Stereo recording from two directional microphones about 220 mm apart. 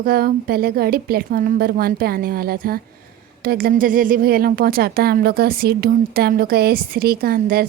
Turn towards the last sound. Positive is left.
turn(degrees=-40)  # may be behind; listen again after turning